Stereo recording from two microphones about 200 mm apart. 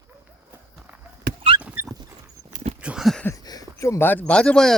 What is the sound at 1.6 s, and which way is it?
Dog, 5° right (ahead or behind).